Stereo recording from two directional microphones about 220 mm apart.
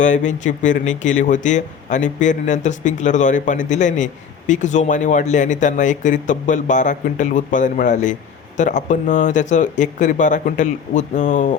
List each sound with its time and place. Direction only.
0.0 s speech: 35° left (ahead or behind)